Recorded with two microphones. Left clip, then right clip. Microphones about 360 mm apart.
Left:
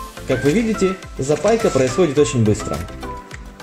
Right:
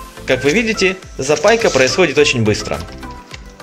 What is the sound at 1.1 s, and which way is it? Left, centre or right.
Speech, right.